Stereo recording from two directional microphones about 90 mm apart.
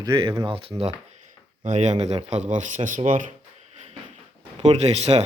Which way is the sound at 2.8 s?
90° right.